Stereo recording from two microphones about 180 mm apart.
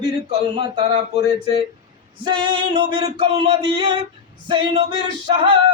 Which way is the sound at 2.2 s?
25° right (ahead or behind).